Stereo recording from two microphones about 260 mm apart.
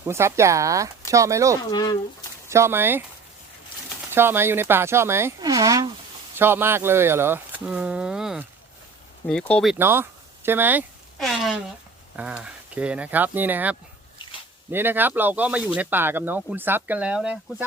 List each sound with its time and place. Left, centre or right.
0.0 s speech: centre
1.7 s speech: centre
2.5 s speech: centre
4.1 s speech: centre
9.7 s speech: centre